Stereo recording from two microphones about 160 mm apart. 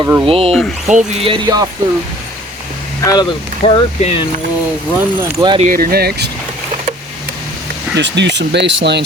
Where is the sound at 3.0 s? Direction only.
25° left (ahead or behind).